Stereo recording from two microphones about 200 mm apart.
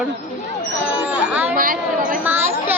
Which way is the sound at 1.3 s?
5° right (ahead or behind).